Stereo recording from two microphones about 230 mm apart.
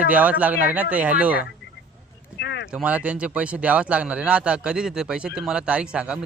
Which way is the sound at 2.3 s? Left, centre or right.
Left.